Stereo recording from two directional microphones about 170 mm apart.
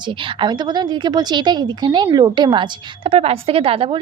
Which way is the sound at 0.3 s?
25° right (ahead or behind).